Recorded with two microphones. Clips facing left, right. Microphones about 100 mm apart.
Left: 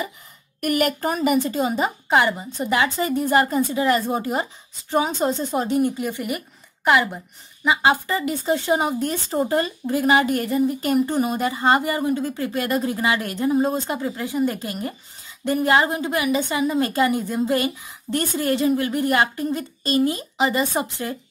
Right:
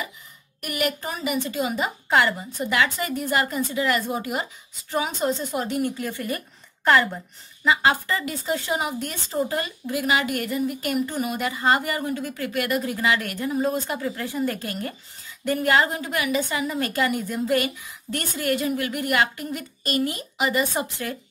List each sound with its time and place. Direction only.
0.6 s speech: 50° left (ahead or behind)
2.0 s a woman's voice: 20° left (ahead or behind)